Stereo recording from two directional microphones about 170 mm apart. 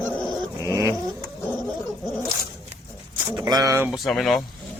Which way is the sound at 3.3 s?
25° right (ahead or behind).